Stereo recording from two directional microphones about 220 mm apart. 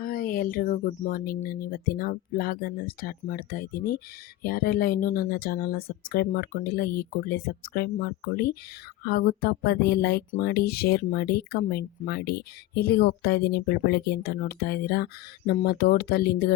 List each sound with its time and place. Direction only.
0.0 s speech: 40° left (ahead or behind)